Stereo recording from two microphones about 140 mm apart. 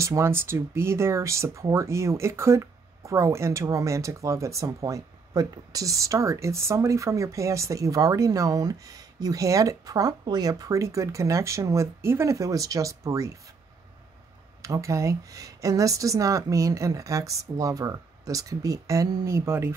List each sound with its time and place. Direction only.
0.0 s speech: 20° right (ahead or behind)
14.6 s speech: 20° right (ahead or behind)